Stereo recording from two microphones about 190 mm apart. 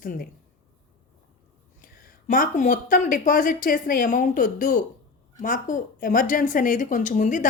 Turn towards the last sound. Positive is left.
turn(degrees=40)  # may be behind; listen again after turning